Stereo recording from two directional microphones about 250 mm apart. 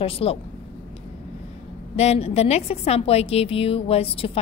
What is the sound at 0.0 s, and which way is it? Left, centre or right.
Speech, left.